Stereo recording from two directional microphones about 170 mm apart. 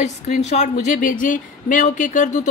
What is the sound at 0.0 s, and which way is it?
A woman's voice, 40° left (ahead or behind).